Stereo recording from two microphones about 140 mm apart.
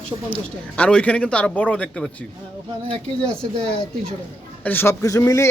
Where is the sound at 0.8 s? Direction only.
10° left (ahead or behind).